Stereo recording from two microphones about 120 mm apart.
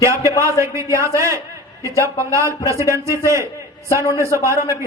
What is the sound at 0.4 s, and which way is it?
A man's voice, 25° right (ahead or behind).